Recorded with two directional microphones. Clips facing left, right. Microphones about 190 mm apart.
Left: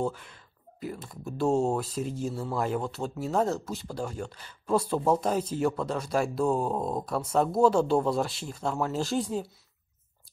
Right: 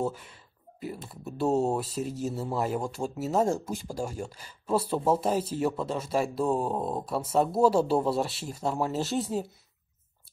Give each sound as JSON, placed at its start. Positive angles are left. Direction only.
{"t": 0.0, "sound": "speech", "side_deg": -5}